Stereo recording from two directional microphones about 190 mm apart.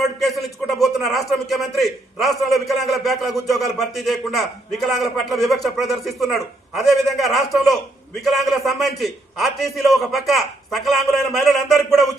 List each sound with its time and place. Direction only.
0.0 s speech: centre (ahead or behind)